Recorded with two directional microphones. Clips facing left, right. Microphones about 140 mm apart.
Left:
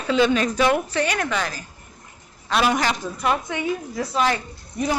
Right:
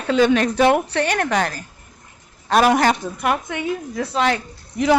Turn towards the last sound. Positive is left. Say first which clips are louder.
# right 7 dB
turn(degrees=-80)